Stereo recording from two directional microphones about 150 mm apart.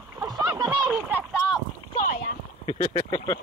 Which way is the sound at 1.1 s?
10° right (ahead or behind).